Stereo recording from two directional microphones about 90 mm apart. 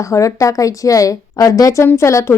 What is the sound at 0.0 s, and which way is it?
Speech, 35° left (ahead or behind).